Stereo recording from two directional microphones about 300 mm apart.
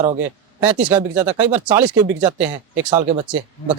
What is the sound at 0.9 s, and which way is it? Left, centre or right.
Speech, centre.